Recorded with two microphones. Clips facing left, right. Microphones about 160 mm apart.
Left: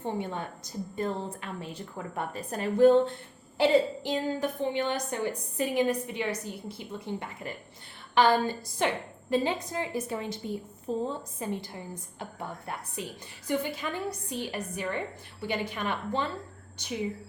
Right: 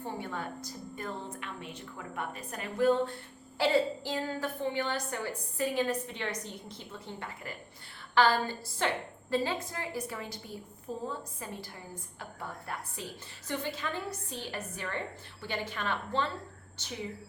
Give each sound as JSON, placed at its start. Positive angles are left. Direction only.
{"t": 0.0, "sound": "a woman's voice", "side_deg": 20}
{"t": 3.6, "sound": "a woman's voice", "side_deg": 20}